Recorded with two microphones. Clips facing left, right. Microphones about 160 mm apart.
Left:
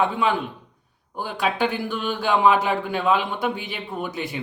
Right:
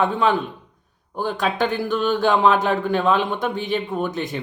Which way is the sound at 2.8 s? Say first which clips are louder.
Right 4 dB; 45° right (ahead or behind).